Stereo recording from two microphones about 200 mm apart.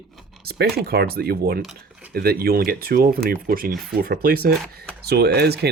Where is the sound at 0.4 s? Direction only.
50° right (ahead or behind).